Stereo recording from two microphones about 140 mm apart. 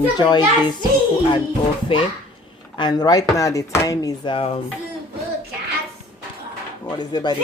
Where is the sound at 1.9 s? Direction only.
40° left (ahead or behind).